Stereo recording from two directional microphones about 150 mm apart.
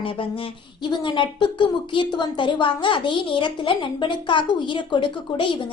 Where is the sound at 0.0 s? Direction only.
35° left (ahead or behind).